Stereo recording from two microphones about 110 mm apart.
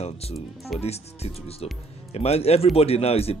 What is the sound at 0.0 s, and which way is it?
Speech, 70° left (ahead or behind).